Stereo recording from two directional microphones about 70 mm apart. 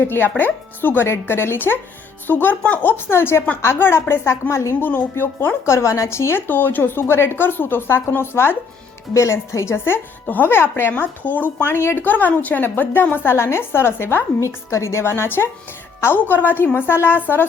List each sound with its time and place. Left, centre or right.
0.1 s speech: left
5.6 s speech: left
6.5 s speech: left
9.1 s speech: left